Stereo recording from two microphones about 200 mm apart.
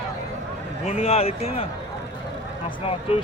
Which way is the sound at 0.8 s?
35° left (ahead or behind).